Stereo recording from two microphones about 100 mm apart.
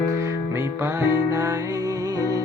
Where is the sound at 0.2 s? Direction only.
30° right (ahead or behind).